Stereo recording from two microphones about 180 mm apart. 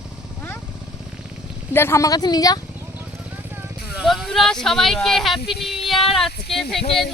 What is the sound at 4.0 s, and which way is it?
Speech, centre (ahead or behind).